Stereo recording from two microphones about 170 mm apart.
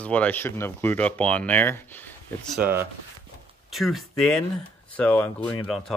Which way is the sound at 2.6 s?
15° right (ahead or behind).